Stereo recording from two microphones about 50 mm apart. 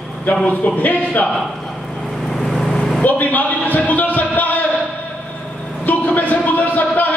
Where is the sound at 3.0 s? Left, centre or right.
Left.